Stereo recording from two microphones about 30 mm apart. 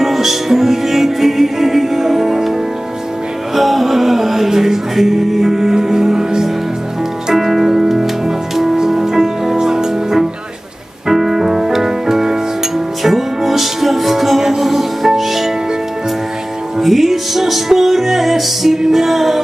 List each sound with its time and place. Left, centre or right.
0.0 s music: centre
3.5 s music: centre; by 9.8 s right
11.1 s music: centre
16.8 s music: centre